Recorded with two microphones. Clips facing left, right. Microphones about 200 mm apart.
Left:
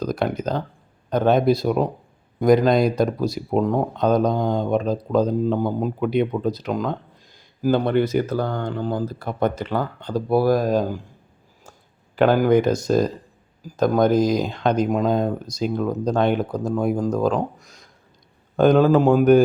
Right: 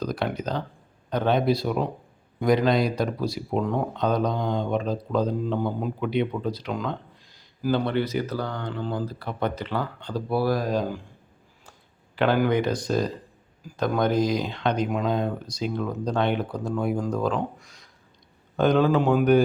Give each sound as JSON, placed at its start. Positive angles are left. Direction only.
{"t": 0.0, "sound": "speech", "side_deg": 45}
{"t": 12.1, "sound": "speech", "side_deg": 45}